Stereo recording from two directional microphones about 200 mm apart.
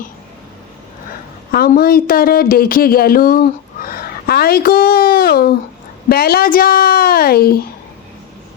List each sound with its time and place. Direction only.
1.5 s a woman's voice: 50° left (ahead or behind)